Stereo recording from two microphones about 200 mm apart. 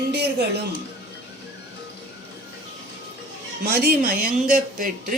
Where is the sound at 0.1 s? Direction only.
55° right (ahead or behind).